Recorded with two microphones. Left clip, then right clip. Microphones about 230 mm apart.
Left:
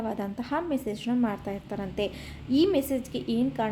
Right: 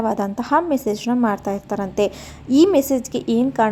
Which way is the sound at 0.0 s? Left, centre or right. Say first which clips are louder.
Right 11 dB; right.